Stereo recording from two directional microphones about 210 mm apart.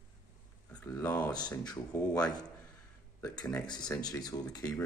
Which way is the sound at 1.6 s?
20° left (ahead or behind).